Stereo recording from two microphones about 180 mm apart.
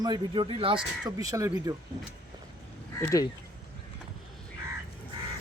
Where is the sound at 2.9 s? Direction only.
20° left (ahead or behind).